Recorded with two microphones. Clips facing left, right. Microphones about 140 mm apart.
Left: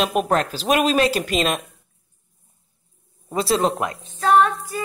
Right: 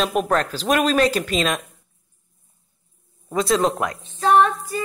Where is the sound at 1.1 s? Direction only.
40° left (ahead or behind).